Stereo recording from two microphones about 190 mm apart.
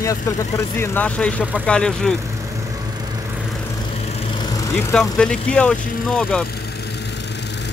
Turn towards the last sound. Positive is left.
turn(degrees=5)  # may be behind; listen again after turning